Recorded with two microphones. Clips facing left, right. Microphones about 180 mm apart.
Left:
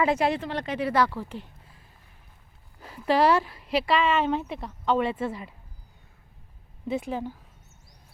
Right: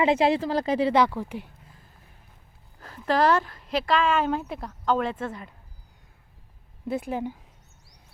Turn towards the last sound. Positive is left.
turn(degrees=0)  # may be behind; listen again after turning